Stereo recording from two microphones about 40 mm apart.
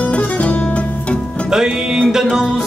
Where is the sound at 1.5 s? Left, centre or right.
Centre.